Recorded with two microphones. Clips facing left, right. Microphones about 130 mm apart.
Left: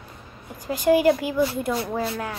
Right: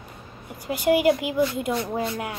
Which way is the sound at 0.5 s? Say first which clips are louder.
Left 2 dB; 15° right (ahead or behind).